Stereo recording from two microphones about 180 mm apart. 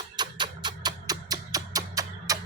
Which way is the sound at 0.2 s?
25° right (ahead or behind).